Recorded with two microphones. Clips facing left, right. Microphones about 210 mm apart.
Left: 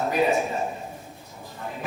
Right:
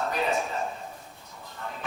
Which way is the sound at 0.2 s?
15° left (ahead or behind).